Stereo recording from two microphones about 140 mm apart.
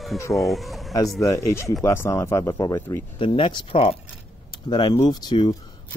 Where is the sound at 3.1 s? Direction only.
40° left (ahead or behind).